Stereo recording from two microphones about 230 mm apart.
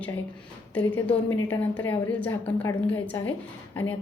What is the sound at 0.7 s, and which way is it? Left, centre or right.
A woman's voice, centre.